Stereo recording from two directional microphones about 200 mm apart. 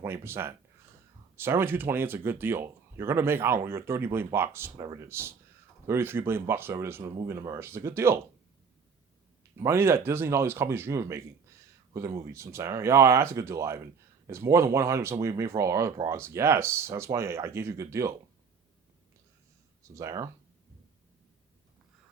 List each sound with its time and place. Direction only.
0.0 s speech: 10° right (ahead or behind)
9.6 s speech: 10° right (ahead or behind)
20.0 s speech: 15° right (ahead or behind)